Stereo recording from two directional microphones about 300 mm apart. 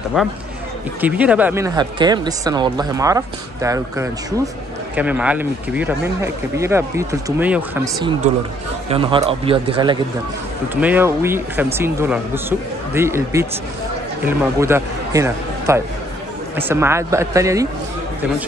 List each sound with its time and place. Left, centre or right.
0.2 s speech: centre
10.7 s a man's voice: centre